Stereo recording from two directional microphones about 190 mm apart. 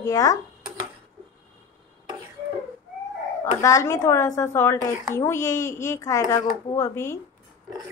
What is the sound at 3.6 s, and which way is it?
Speech, 15° left (ahead or behind).